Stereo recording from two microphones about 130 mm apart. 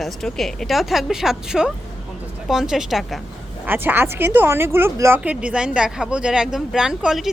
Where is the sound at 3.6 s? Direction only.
15° right (ahead or behind).